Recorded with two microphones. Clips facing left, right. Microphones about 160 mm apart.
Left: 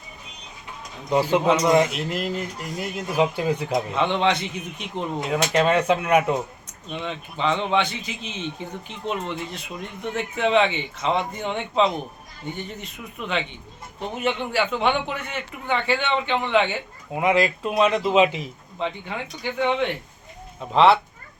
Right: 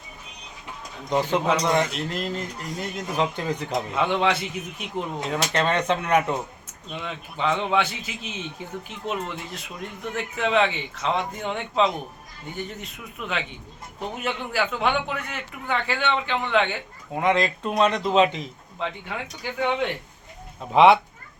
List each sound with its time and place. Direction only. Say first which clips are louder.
1.1 s speech: left 3 dB; 5° left (ahead or behind)
3.9 s a man's voice: even; 5° right (ahead or behind)
5.3 s speech: left 4 dB; 10° left (ahead or behind)
6.9 s a man's voice: left 3 dB; 5° right (ahead or behind)
20.7 s speech: right 1 dB; 15° right (ahead or behind)